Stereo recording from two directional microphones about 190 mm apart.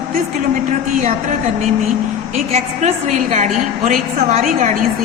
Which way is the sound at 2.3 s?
35° right (ahead or behind).